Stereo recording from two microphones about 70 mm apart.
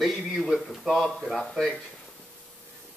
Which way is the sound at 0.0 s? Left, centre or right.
Centre.